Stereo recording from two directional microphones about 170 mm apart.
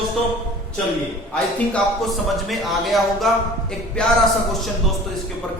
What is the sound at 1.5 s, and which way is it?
A man's voice, 5° left (ahead or behind).